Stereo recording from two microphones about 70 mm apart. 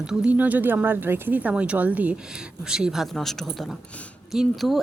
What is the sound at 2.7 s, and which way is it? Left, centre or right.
Speech, centre.